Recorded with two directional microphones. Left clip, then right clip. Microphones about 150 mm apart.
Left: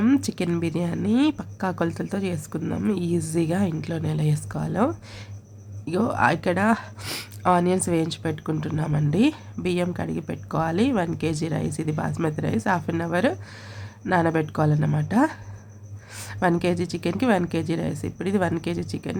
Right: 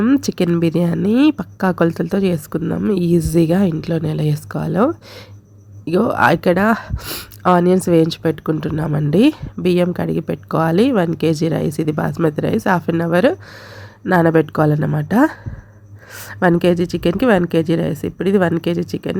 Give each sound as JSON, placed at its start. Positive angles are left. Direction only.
{"t": 0.2, "sound": "a woman's voice", "side_deg": -45}
{"t": 2.6, "sound": "a woman's voice", "side_deg": -30}
{"t": 2.9, "sound": "a woman's voice", "side_deg": -45}
{"t": 7.0, "sound": "a woman's voice", "side_deg": -30}